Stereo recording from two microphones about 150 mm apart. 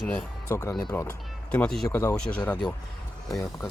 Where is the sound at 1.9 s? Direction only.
20° left (ahead or behind).